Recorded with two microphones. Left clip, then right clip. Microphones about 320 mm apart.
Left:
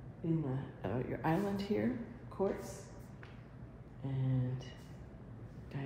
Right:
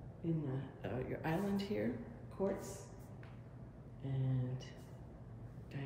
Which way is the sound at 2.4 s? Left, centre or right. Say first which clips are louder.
Left 3 dB; left.